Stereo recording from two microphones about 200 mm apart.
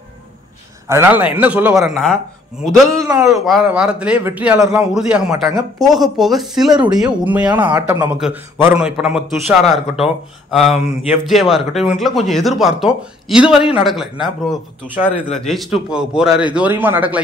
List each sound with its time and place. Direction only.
0.8 s speech: 10° right (ahead or behind)
3.0 s speech: 15° right (ahead or behind)
3.4 s speech: 5° right (ahead or behind)
6.7 s speech: 20° right (ahead or behind)
7.0 s speech: 5° right (ahead or behind)
7.4 s speech: 25° right (ahead or behind)
7.7 s speech: 15° right (ahead or behind)